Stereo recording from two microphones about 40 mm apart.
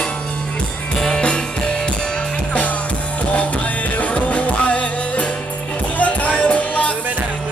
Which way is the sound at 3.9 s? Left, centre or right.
Left.